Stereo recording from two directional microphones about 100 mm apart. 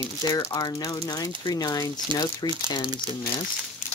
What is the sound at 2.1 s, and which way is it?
Speech, 55° right (ahead or behind).